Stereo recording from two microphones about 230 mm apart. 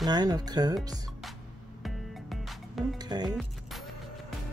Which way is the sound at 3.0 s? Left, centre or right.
Centre.